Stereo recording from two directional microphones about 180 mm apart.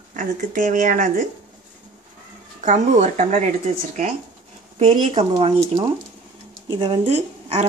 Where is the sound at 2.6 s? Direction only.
40° right (ahead or behind).